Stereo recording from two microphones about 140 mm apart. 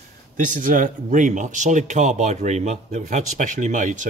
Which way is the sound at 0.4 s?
70° right (ahead or behind).